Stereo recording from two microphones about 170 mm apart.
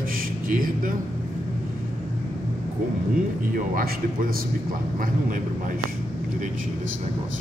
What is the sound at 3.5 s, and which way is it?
Speech, 55° right (ahead or behind).